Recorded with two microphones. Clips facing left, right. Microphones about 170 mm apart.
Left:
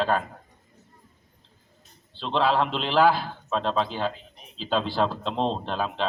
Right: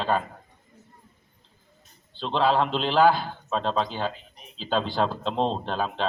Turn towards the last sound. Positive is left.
turn(degrees=0)  # may be behind; listen again after turning